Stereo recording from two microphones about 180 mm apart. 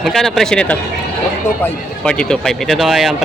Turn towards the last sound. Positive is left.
turn(degrees=0)  # may be behind; listen again after turning